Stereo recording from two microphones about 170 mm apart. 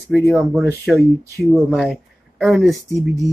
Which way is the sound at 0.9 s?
15° right (ahead or behind).